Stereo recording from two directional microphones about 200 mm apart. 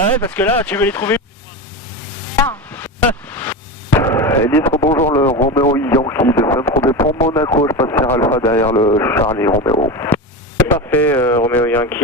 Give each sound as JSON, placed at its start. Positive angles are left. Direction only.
{"t": 0.3, "sound": "speech", "side_deg": 10}
{"t": 2.4, "sound": "a sound", "side_deg": 10}
{"t": 4.9, "sound": "speech", "side_deg": 10}
{"t": 5.2, "sound": "speech", "side_deg": 30}
{"t": 5.7, "sound": "speech", "side_deg": 15}